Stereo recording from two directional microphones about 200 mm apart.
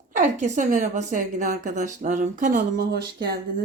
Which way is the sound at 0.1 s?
35° right (ahead or behind).